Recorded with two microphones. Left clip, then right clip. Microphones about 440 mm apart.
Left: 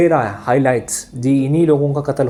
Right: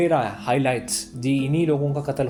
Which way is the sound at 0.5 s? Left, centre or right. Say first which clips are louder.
Left 7 dB; right.